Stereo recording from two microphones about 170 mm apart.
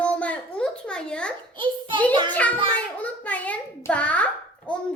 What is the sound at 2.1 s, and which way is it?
Speech, 25° right (ahead or behind).